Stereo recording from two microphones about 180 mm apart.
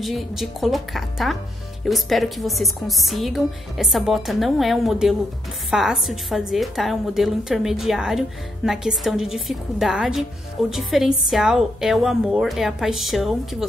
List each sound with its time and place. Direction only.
0.0 s a woman's voice: centre (ahead or behind)